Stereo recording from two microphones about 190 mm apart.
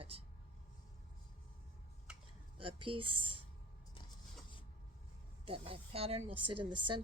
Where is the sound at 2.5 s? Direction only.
25° right (ahead or behind).